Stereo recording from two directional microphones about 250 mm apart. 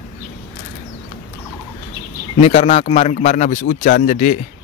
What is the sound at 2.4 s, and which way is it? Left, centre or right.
A man's voice, left.